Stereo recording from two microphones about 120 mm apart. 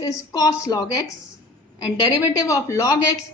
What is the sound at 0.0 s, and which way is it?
Speech, 35° left (ahead or behind).